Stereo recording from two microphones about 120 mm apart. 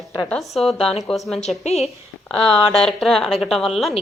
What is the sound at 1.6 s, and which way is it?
Speech, 60° left (ahead or behind).